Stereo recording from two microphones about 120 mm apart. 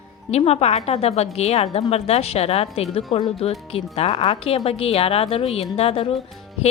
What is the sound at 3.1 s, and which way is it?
Speech, 40° left (ahead or behind).